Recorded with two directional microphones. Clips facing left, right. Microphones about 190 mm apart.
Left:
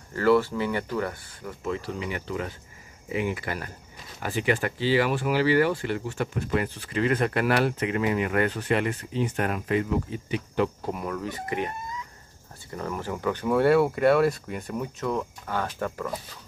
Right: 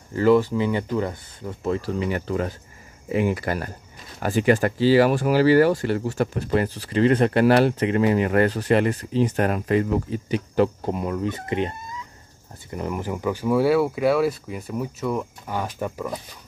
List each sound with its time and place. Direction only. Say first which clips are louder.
0.1 s speech: right 4 dB; 15° right (ahead or behind)
1.7 s speech: right 6 dB; 40° right (ahead or behind)
10.9 s speech: right 5 dB; 20° right (ahead or behind)
12.7 s speech: right 4 dB; 15° right (ahead or behind)